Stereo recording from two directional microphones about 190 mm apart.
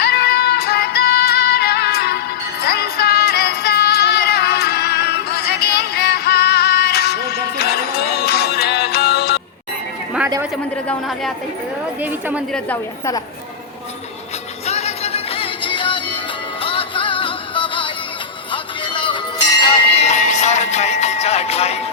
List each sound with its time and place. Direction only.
0.0 s music: 55° left (ahead or behind)
12.5 s a woman's voice: 10° left (ahead or behind)
14.7 s music: 35° left (ahead or behind)